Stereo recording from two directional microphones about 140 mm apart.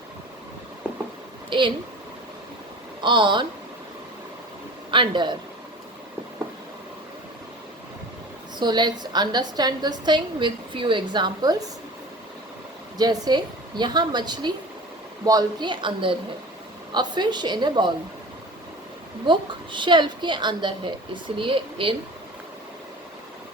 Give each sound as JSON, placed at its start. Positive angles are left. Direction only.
{"t": 1.5, "sound": "speech", "side_deg": -35}
{"t": 3.0, "sound": "a woman's voice", "side_deg": -35}
{"t": 4.9, "sound": "a woman's voice", "side_deg": -35}
{"t": 8.5, "sound": "a woman's voice", "side_deg": -30}
{"t": 13.0, "sound": "a woman's voice", "side_deg": -30}
{"t": 19.2, "sound": "a woman's voice", "side_deg": -35}